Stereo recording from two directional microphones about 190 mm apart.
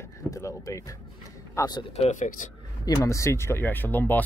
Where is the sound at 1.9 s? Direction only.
40° left (ahead or behind).